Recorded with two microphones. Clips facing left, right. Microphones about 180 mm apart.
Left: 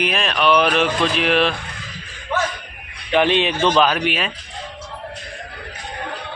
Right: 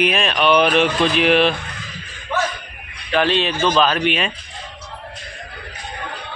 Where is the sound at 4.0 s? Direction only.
5° left (ahead or behind).